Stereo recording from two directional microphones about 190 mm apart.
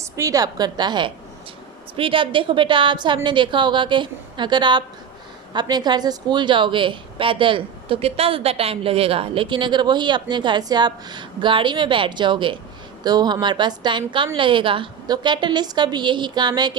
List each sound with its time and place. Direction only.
0.0 s a woman's voice: 15° right (ahead or behind)